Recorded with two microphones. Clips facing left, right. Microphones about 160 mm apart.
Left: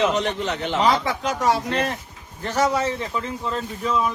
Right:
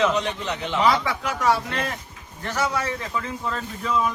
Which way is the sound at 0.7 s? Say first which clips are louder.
Even; 35° left (ahead or behind).